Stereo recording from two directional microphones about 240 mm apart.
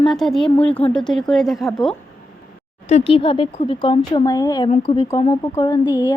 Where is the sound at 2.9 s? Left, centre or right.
Left.